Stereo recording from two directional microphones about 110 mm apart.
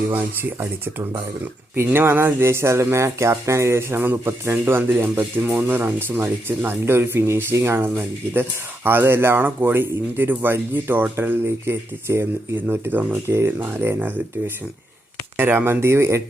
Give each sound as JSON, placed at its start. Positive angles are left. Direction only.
{"t": 1.7, "sound": "speech", "side_deg": -20}